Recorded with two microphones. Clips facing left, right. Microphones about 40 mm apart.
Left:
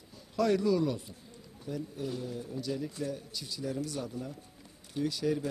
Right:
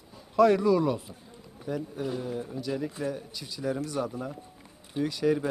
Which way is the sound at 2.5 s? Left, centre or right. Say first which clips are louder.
Right 3 dB; centre.